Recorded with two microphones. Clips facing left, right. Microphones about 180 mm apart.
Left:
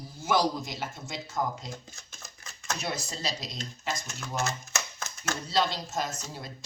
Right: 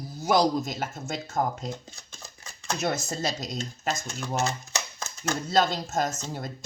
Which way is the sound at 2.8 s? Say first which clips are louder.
Right 8 dB; 50° right (ahead or behind).